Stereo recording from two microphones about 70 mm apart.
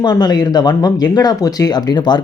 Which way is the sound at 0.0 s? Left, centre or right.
Left.